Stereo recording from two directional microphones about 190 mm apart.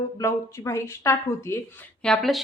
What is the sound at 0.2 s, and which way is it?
A woman's voice, 15° left (ahead or behind).